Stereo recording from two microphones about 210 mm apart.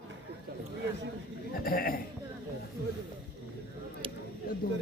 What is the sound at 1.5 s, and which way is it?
Sheep, 45° left (ahead or behind).